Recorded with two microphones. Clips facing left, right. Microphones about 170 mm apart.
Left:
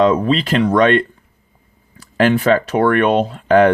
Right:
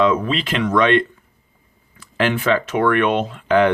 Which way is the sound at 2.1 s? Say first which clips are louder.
Left 5 dB; 40° left (ahead or behind).